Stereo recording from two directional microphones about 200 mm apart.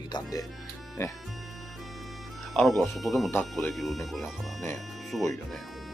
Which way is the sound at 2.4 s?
Centre (ahead or behind).